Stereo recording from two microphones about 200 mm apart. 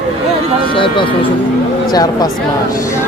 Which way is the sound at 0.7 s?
25° left (ahead or behind).